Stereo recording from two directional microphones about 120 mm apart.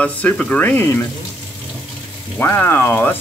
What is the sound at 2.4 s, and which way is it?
Speech, 20° left (ahead or behind).